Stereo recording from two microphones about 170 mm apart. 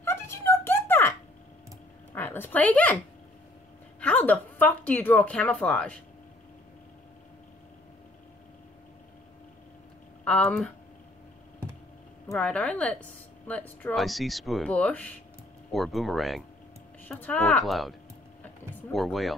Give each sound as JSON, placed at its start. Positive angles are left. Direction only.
{"t": 0.0, "sound": "music", "side_deg": 15}
{"t": 2.1, "sound": "speech", "side_deg": 10}
{"t": 4.0, "sound": "speech", "side_deg": 10}
{"t": 10.2, "sound": "speech", "side_deg": 5}
{"t": 12.3, "sound": "speech", "side_deg": 5}
{"t": 18.4, "sound": "a sound", "side_deg": 5}